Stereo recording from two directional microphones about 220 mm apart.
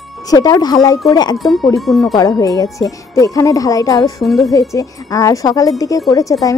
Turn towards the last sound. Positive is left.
turn(degrees=15)  # may be behind; listen again after turning